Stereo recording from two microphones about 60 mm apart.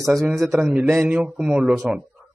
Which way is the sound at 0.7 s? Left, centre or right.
Centre.